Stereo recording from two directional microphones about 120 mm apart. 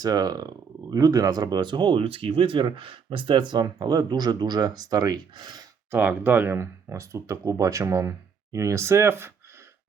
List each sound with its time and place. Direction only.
0.0 s speech: 35° right (ahead or behind)
5.9 s speech: 15° right (ahead or behind)